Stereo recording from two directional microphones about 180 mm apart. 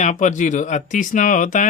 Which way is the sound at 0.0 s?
40° left (ahead or behind).